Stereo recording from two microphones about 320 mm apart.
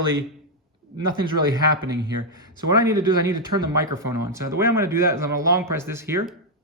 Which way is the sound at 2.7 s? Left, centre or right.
Centre.